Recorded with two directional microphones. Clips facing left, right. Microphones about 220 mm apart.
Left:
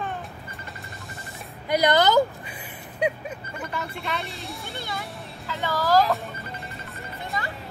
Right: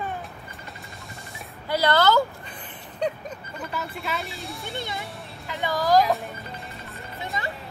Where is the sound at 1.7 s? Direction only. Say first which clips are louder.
Left 1 dB; 15° left (ahead or behind).